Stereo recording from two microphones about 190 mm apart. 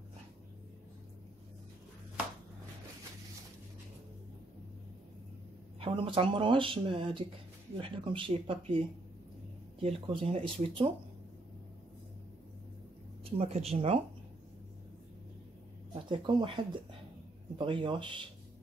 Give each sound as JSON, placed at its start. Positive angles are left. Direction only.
{"t": 5.8, "sound": "speech", "side_deg": -25}
{"t": 13.2, "sound": "speech", "side_deg": -30}
{"t": 15.9, "sound": "speech", "side_deg": -25}